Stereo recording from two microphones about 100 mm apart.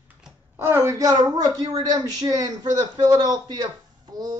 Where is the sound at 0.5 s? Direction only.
25° right (ahead or behind).